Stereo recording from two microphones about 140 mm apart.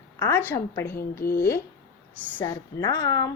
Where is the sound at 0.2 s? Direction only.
20° left (ahead or behind).